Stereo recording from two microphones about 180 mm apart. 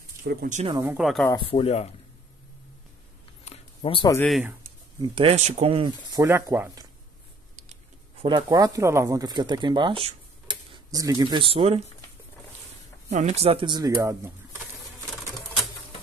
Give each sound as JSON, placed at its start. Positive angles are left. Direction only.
{"t": 0.2, "sound": "speech", "side_deg": -55}
{"t": 0.7, "sound": "speech", "side_deg": -20}
{"t": 0.9, "sound": "speech", "side_deg": 0}
{"t": 1.3, "sound": "speech", "side_deg": 30}
{"t": 3.4, "sound": "a sound", "side_deg": 30}
{"t": 4.3, "sound": "speech", "side_deg": -10}
{"t": 5.0, "sound": "speech", "side_deg": -30}
{"t": 8.2, "sound": "speech", "side_deg": -25}
{"t": 13.1, "sound": "speech", "side_deg": -35}